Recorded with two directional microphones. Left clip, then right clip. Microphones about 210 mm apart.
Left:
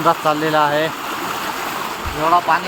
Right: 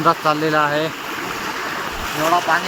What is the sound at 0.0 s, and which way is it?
Speech, 5° right (ahead or behind).